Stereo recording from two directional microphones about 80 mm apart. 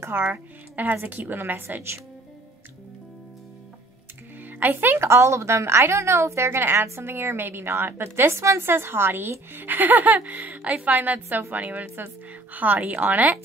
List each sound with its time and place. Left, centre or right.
0.0 s a woman's voice: right
4.5 s a woman's voice: right